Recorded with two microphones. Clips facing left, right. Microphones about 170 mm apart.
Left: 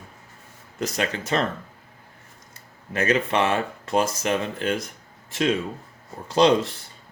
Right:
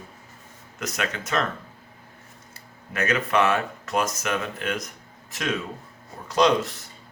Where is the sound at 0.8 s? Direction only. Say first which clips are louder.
Left 3 dB; 30° left (ahead or behind).